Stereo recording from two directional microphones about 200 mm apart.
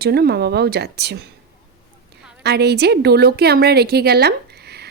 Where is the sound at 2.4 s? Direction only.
55° right (ahead or behind).